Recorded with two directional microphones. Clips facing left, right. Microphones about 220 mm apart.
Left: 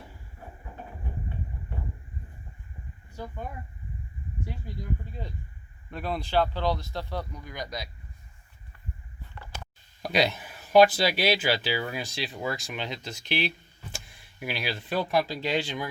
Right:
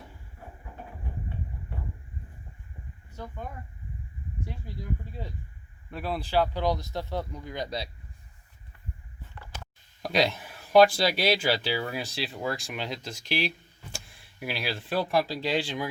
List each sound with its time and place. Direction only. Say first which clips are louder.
0.0 s a sound: left 1 dB; centre (ahead or behind)
3.2 s speech: left 2 dB; 10° left (ahead or behind); by 7.9 s 30° right (ahead or behind)
10.0 s speech: even; centre (ahead or behind)